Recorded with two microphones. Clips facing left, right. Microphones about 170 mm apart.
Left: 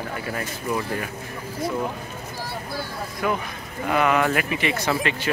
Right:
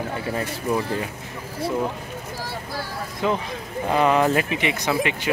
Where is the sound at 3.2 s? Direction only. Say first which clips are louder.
Right 2 dB; 25° right (ahead or behind).